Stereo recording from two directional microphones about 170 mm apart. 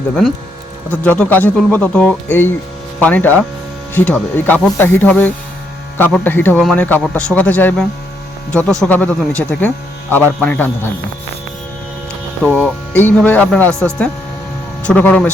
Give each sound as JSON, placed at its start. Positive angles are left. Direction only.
{"t": 0.9, "sound": "speech", "side_deg": 10}
{"t": 12.5, "sound": "speech", "side_deg": 10}